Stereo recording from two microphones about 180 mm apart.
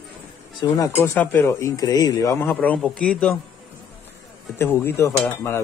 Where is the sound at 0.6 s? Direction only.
25° left (ahead or behind).